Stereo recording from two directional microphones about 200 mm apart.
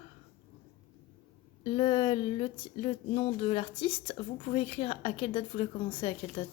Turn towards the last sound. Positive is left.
turn(degrees=25)  # may be behind; listen again after turning